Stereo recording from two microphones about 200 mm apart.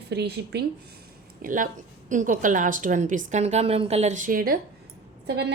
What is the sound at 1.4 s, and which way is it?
A woman's voice, 40° right (ahead or behind).